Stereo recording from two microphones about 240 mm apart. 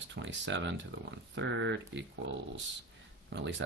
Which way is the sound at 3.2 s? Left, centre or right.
Right.